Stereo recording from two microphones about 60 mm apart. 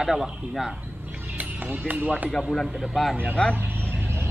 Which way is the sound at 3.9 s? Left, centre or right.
Right.